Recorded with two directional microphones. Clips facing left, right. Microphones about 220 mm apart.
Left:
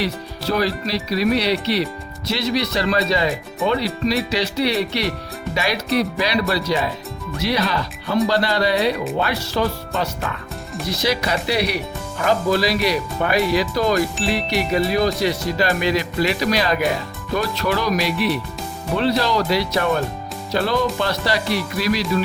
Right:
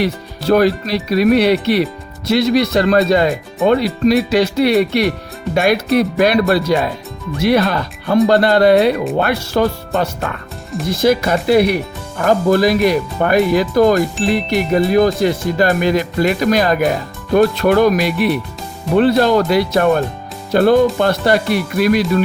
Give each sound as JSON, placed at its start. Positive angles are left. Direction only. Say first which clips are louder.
{"t": 0.0, "sound": "speech", "louder": "right 5 dB", "side_deg": -55}